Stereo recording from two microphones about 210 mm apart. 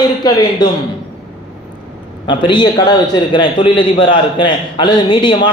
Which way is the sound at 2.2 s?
20° left (ahead or behind).